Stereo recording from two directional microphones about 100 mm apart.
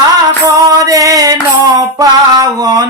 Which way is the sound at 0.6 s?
35° right (ahead or behind).